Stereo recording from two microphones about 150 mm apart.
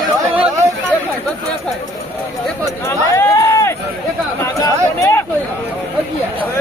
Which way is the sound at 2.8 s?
20° left (ahead or behind).